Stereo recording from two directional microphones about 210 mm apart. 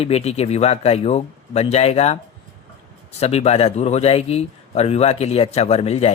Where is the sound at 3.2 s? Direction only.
30° left (ahead or behind).